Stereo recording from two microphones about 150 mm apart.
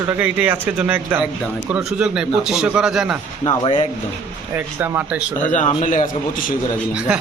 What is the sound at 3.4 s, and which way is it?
Speech, 30° left (ahead or behind).